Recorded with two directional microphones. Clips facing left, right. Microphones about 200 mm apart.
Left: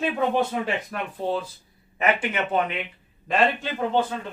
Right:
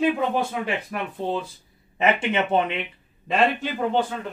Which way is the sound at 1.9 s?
25° right (ahead or behind).